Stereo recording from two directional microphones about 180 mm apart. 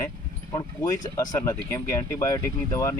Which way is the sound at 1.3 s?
20° left (ahead or behind).